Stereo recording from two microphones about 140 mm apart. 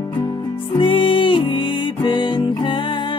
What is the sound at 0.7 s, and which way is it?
Music, 40° left (ahead or behind).